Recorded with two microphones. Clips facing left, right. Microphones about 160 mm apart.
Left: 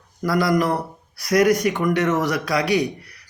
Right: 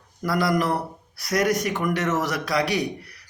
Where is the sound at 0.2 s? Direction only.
Centre (ahead or behind).